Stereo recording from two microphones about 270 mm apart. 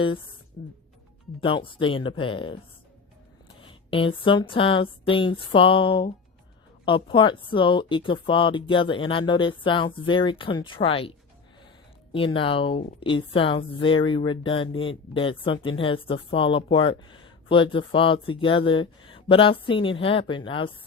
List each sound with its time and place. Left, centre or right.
1.4 s speech: centre
3.6 s speech: centre
12.1 s speech: centre